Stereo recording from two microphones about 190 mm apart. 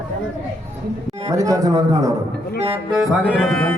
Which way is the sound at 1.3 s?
15° right (ahead or behind).